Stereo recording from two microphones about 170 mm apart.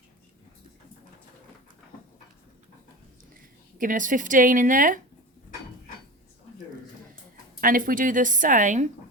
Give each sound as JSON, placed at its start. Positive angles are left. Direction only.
{"t": 3.8, "sound": "a woman's voice", "side_deg": -50}
{"t": 7.6, "sound": "a woman's voice", "side_deg": -55}